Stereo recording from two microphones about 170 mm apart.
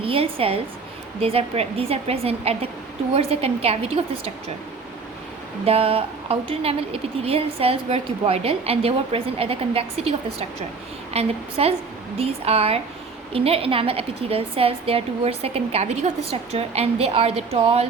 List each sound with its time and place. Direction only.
0.0 s a woman's voice: 35° right (ahead or behind)
5.6 s speech: 35° right (ahead or behind)